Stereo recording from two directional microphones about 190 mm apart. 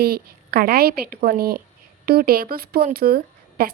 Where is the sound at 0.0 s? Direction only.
55° right (ahead or behind).